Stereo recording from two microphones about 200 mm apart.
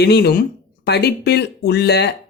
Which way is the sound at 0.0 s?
55° left (ahead or behind).